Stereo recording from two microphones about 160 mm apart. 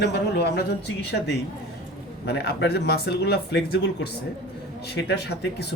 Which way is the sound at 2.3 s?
90° left.